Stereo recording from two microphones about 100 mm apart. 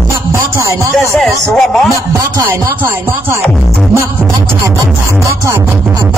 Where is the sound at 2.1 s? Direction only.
35° right (ahead or behind).